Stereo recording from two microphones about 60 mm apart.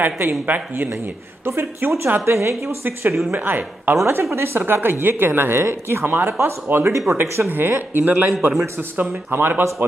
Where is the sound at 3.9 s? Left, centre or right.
Right.